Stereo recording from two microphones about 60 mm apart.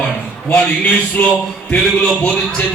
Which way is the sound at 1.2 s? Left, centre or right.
Left.